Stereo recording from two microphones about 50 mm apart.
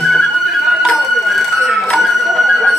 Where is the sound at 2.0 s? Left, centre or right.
Centre.